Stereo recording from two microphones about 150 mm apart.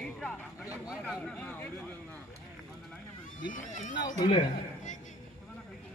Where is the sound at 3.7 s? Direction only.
60° left (ahead or behind).